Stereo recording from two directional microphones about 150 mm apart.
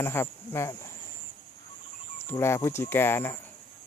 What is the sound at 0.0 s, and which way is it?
Speech, 15° left (ahead or behind).